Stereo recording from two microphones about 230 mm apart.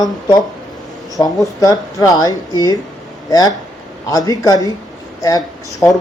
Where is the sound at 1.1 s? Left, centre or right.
Centre.